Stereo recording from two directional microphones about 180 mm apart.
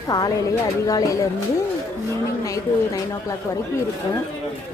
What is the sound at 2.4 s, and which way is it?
Speech, 20° left (ahead or behind).